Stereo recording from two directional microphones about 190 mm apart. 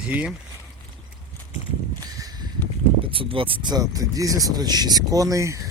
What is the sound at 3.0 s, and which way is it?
Speech, 30° right (ahead or behind).